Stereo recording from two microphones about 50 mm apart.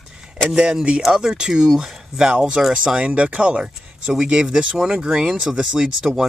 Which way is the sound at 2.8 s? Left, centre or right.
Right.